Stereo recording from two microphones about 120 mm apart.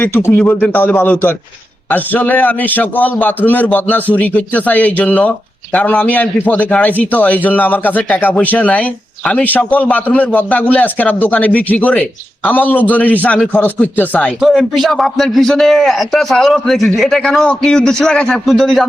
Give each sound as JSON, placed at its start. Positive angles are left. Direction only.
{"t": 0.0, "sound": "a man's voice", "side_deg": 20}
{"t": 14.4, "sound": "a man's voice", "side_deg": 0}